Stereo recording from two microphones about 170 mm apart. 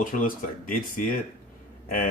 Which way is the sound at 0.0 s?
55° left (ahead or behind).